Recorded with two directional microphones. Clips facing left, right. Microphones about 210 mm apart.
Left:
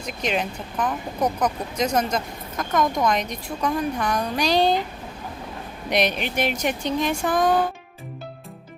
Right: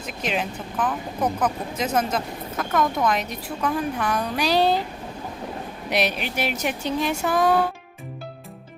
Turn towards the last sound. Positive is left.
turn(degrees=-5)  # may be behind; listen again after turning